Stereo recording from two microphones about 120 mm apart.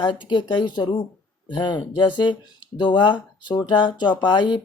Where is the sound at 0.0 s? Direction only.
40° left (ahead or behind).